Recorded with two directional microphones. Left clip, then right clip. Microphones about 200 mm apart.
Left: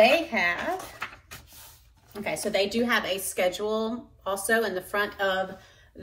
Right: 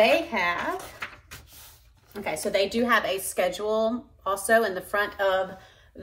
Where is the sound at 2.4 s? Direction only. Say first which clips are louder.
Right 2 dB; 15° right (ahead or behind).